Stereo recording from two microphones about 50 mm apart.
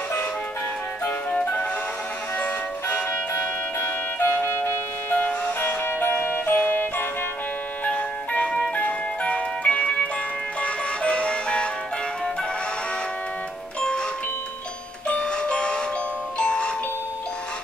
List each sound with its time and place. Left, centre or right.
1.0 s music: left
3.1 s music: left
13.7 s music: centre
15.0 s music: centre